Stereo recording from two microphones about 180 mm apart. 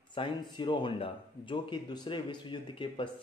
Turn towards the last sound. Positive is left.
turn(degrees=25)  # may be behind; listen again after turning